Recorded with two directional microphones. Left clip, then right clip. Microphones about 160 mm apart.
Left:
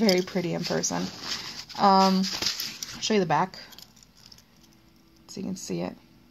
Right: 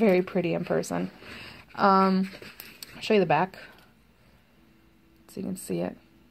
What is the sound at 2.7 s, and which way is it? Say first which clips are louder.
Speech: right 5 dB; 15° right (ahead or behind).